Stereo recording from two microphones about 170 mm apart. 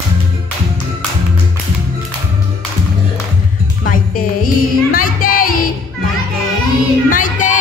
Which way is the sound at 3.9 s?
55° left (ahead or behind).